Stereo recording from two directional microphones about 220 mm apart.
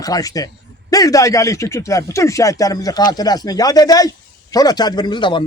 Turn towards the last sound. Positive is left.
turn(degrees=20)  # may be behind; listen again after turning